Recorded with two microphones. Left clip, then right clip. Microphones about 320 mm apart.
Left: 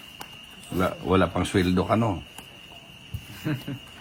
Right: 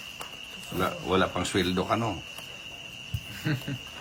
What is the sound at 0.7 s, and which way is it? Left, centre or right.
Speech, left.